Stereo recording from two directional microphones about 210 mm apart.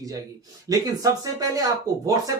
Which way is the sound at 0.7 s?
15° right (ahead or behind).